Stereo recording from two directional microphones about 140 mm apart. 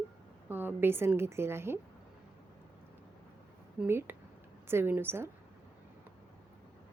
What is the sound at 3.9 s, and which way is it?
Speech, 15° right (ahead or behind).